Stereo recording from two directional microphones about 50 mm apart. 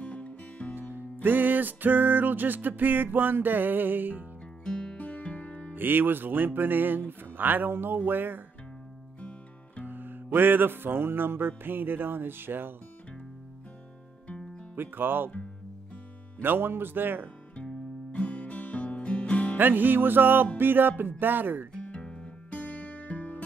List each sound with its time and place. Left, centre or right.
0.0 s music: left
0.7 s music: right
4.6 s music: centre
5.8 s music: right
9.8 s music: right
14.2 s music: left
14.8 s music: right
16.3 s music: right
18.1 s music: left
19.6 s music: right
21.2 s speech: right
21.8 s music: left